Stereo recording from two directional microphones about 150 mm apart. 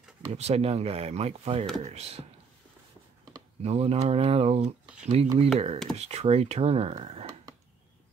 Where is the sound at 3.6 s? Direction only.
45° right (ahead or behind).